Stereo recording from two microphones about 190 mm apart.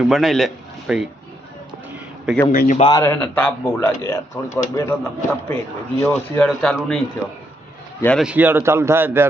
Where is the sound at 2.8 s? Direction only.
20° left (ahead or behind).